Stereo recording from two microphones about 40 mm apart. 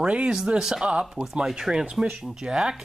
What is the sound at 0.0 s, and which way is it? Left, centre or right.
Speech, right.